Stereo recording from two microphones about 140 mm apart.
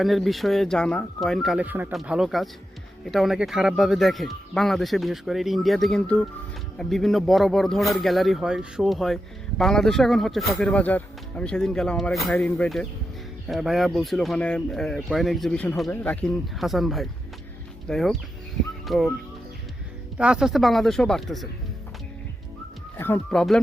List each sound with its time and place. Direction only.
0.0 s speech: centre (ahead or behind)
1.6 s speech: 15° right (ahead or behind)
1.9 s speech: centre (ahead or behind)
12.3 s speech: 10° left (ahead or behind)
20.1 s speech: 5° right (ahead or behind)
23.0 s speech: 15° left (ahead or behind)
23.3 s speech: 5° left (ahead or behind)